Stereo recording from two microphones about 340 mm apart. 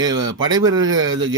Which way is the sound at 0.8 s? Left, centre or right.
Right.